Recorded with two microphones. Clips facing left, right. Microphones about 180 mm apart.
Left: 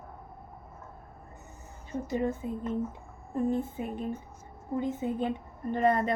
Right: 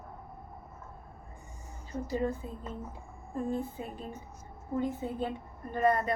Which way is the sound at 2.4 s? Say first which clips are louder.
Left 7 dB; 10° left (ahead or behind).